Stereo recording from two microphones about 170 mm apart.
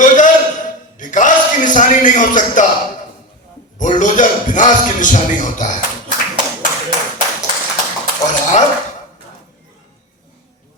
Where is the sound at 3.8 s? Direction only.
50° left (ahead or behind).